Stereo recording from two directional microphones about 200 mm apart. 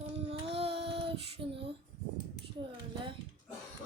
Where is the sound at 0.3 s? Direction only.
30° right (ahead or behind).